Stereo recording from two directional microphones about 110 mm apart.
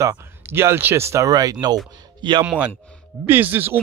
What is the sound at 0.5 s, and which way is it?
Speech, 20° right (ahead or behind).